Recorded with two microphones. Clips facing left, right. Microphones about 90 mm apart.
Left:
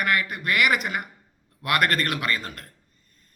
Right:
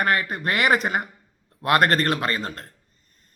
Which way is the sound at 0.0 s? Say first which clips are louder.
Right 2 dB; 35° right (ahead or behind).